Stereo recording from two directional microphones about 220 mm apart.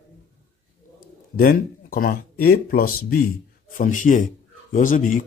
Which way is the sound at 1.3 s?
40° left (ahead or behind).